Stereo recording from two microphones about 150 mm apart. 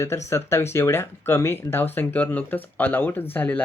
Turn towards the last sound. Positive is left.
turn(degrees=10)  # may be behind; listen again after turning